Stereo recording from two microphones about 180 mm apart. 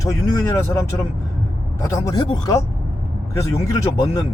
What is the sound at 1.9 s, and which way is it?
Speech, 20° left (ahead or behind).